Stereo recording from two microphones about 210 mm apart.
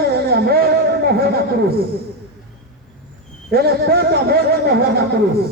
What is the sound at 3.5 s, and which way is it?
Speech, 45° right (ahead or behind).